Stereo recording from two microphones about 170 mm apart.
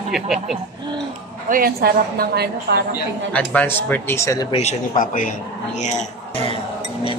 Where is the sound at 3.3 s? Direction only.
10° left (ahead or behind).